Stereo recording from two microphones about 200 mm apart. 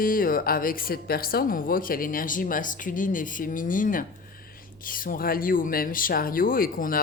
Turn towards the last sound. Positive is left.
turn(degrees=45)  # may be behind; listen again after turning